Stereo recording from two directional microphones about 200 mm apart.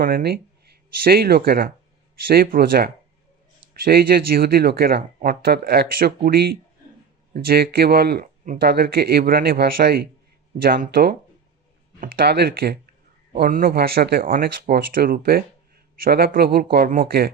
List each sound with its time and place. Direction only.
0.0 s speech: 50° right (ahead or behind)